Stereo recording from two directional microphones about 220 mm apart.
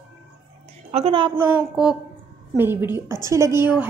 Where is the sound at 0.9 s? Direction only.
25° right (ahead or behind).